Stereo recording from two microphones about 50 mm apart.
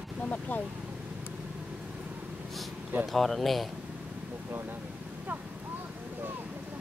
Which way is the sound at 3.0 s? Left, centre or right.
Centre.